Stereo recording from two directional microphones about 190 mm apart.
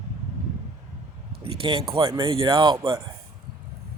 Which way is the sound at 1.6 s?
30° right (ahead or behind).